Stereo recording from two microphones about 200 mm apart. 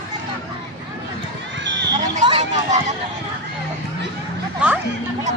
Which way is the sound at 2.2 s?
30° right (ahead or behind).